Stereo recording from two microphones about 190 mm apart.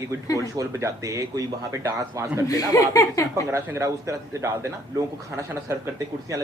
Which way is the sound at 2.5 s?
15° left (ahead or behind).